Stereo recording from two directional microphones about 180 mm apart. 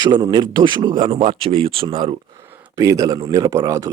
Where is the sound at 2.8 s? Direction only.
20° right (ahead or behind).